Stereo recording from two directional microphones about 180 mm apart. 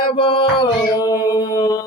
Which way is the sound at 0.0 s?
25° left (ahead or behind).